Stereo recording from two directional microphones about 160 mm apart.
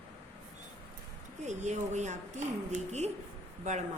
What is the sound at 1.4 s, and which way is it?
Speech, 45° right (ahead or behind).